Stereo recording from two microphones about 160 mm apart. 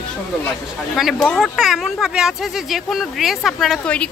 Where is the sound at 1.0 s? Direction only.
Centre (ahead or behind).